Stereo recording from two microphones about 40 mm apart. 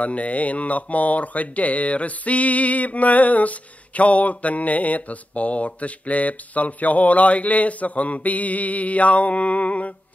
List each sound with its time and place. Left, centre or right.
0.0 s speech: left